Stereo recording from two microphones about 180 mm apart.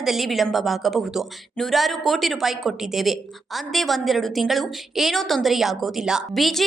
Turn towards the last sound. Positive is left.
turn(degrees=0)  # may be behind; listen again after turning